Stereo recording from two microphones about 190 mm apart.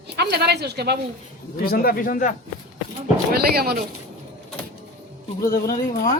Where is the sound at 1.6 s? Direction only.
50° left (ahead or behind).